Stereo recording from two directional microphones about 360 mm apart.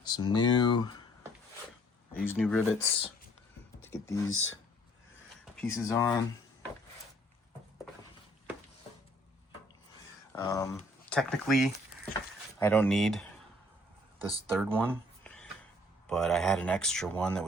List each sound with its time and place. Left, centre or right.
0.0 s speech: centre
2.1 s speech: centre
4.3 s speech: left
5.5 s speech: centre
10.3 s speech: centre
14.5 s a sound: centre
16.0 s speech: centre